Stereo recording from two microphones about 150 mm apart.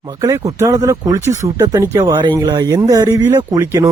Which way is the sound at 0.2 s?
20° right (ahead or behind).